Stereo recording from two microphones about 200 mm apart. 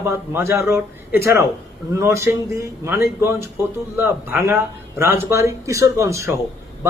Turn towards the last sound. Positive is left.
turn(degrees=-15)  # may be behind; listen again after turning